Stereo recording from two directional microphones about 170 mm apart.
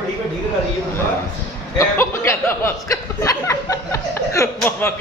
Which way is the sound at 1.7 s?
15° left (ahead or behind).